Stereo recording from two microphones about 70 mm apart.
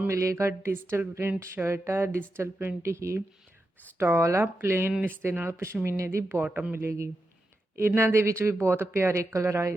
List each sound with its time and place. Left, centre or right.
0.1 s speech: right
5.0 s speech: right
5.5 s speech: right
6.7 s speech: right